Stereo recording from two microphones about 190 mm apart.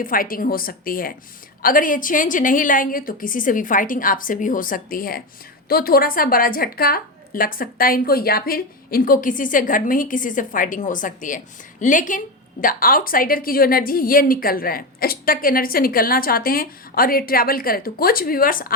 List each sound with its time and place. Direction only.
0.0 s a woman's voice: 50° left (ahead or behind)